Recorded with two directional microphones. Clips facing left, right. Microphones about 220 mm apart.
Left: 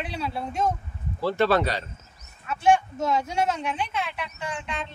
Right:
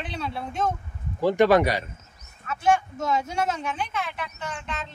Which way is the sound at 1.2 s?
15° right (ahead or behind).